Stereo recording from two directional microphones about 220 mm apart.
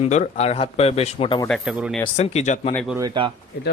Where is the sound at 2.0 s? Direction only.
30° left (ahead or behind).